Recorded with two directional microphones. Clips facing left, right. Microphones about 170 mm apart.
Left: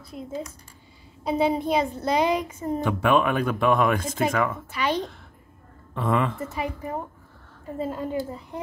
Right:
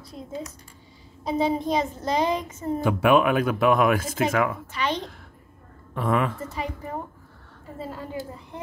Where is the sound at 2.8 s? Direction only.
10° right (ahead or behind).